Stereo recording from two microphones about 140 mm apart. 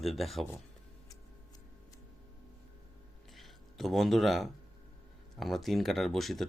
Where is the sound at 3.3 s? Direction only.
Centre (ahead or behind).